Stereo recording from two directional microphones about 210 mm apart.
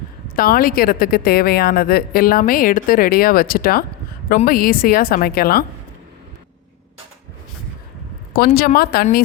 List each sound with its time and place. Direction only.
0.3 s a woman's voice: 45° left (ahead or behind)
8.5 s a woman's voice: 45° left (ahead or behind)